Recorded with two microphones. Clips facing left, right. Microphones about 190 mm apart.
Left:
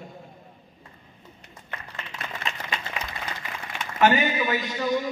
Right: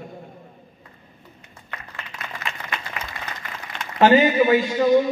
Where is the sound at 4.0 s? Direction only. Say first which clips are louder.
Right 6 dB; 30° right (ahead or behind).